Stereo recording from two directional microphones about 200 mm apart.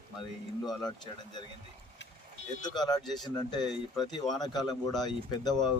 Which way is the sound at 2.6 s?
20° left (ahead or behind).